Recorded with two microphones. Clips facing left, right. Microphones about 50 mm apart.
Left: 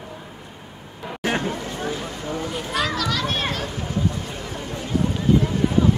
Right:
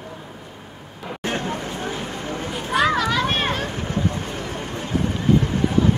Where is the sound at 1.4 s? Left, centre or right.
Right.